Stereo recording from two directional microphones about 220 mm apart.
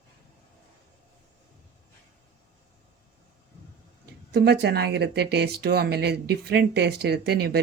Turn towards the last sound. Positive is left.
turn(degrees=-45)  # may be behind; listen again after turning